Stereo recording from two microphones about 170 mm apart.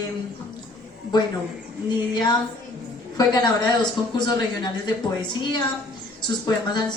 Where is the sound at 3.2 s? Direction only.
25° left (ahead or behind).